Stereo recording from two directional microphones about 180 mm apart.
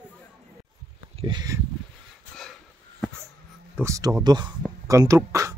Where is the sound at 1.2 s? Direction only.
25° right (ahead or behind).